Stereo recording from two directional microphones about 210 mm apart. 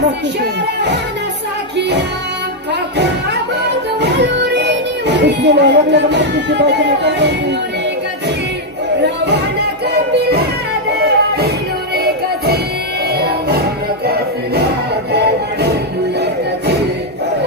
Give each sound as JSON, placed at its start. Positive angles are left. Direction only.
{"t": 1.8, "sound": "music", "side_deg": -55}
{"t": 4.0, "sound": "music", "side_deg": -55}
{"t": 9.0, "sound": "a sound", "side_deg": -55}
{"t": 10.1, "sound": "music", "side_deg": -50}